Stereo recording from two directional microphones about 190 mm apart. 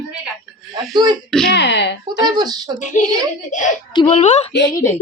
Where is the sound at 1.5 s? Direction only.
65° left (ahead or behind).